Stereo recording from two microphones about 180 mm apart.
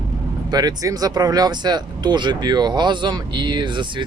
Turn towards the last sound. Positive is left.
turn(degrees=-25)  # may be behind; listen again after turning